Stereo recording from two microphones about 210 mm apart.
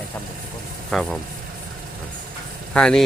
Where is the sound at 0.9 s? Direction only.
Centre (ahead or behind).